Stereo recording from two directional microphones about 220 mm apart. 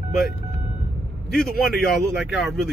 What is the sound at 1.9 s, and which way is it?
Speech, centre (ahead or behind).